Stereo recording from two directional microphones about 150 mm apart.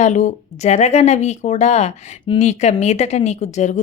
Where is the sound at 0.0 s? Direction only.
50° left (ahead or behind).